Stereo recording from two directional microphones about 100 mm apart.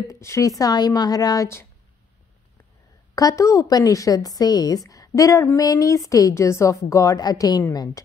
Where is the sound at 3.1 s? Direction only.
35° left (ahead or behind).